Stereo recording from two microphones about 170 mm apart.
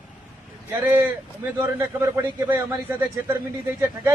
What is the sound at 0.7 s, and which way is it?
A man's voice, 10° right (ahead or behind).